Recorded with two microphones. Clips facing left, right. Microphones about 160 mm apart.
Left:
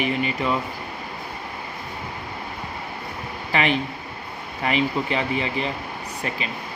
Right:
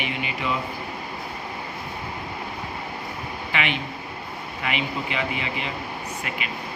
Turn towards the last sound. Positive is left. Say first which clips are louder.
# left 2 dB
turn(degrees=35)  # may be behind; listen again after turning